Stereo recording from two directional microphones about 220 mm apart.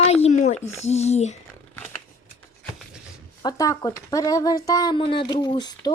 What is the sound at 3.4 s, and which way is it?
Speech, 15° left (ahead or behind).